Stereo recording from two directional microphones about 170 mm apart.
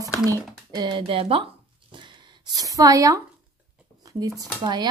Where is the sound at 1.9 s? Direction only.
25° right (ahead or behind).